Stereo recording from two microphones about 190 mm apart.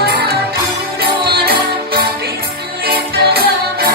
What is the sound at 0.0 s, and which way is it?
Music, 55° right (ahead or behind).